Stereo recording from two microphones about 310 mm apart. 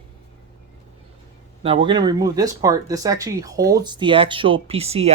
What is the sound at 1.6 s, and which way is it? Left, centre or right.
Speech, centre.